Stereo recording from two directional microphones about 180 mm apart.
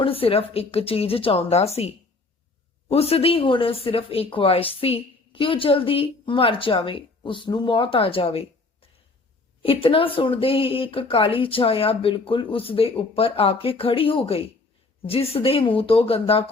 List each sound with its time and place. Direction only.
0.0 s speech: 30° left (ahead or behind)
2.9 s speech: 35° left (ahead or behind)
9.6 s speech: 30° left (ahead or behind)